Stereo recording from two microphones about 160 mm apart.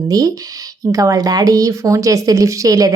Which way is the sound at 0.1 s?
20° right (ahead or behind).